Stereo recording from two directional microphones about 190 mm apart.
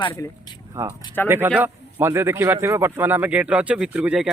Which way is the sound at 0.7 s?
15° right (ahead or behind).